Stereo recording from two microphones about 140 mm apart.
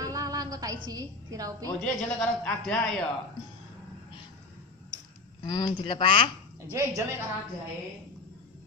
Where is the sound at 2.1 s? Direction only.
5° left (ahead or behind).